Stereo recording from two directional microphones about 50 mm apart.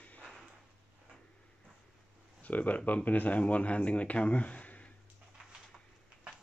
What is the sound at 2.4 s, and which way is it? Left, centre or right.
Speech, left.